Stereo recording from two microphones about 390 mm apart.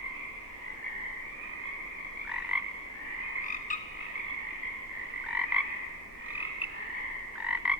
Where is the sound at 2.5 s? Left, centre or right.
Centre.